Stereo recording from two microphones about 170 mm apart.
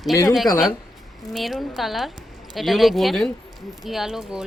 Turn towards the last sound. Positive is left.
turn(degrees=-5)  # may be behind; listen again after turning